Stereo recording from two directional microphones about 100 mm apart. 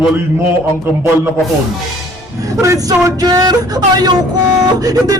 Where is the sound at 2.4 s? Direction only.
35° right (ahead or behind).